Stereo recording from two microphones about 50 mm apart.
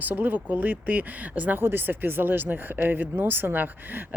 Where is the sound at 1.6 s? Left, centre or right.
Right.